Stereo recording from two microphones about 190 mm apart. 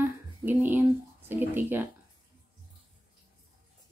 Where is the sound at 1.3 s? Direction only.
10° right (ahead or behind).